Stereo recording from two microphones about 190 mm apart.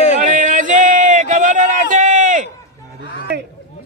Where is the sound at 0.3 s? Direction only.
45° right (ahead or behind).